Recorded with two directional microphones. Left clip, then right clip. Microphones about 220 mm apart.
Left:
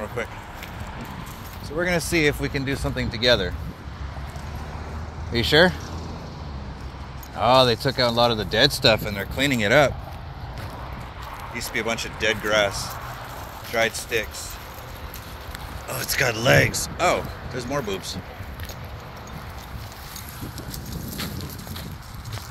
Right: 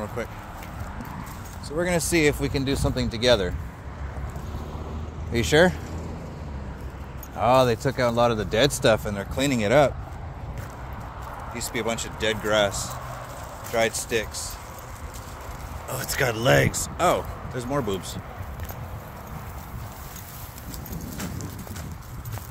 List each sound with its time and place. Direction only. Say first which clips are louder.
1.8 s speech: left 1 dB; 10° right (ahead or behind)
5.3 s speech: left 2 dB; 10° right (ahead or behind)
7.3 s speech: left 2 dB; 5° right (ahead or behind)
11.5 s speech: left 2 dB; centre (ahead or behind)
15.9 s speech: left 2 dB; 10° right (ahead or behind)